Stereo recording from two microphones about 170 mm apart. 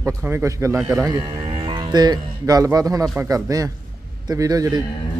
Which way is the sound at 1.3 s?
30° right (ahead or behind).